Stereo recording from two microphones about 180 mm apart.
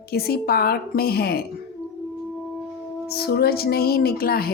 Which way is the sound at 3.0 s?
60° left (ahead or behind).